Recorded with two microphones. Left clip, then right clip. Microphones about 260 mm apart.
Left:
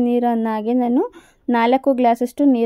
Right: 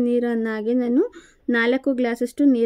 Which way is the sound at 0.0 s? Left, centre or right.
Centre.